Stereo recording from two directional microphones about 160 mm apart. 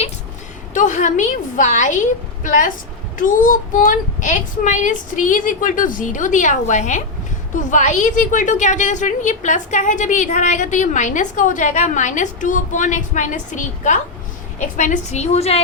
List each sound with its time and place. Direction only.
0.7 s a woman's voice: 50° left (ahead or behind)